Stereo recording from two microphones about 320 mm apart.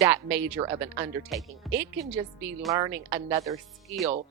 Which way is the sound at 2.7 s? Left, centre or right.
Centre.